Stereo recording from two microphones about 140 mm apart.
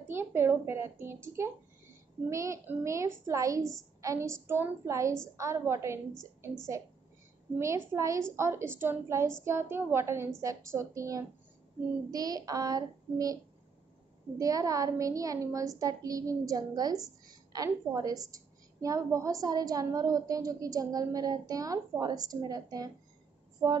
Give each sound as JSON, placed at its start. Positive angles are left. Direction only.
{"t": 0.1, "sound": "a woman's voice", "side_deg": -15}
{"t": 7.5, "sound": "a woman's voice", "side_deg": -20}
{"t": 14.4, "sound": "a woman's voice", "side_deg": -25}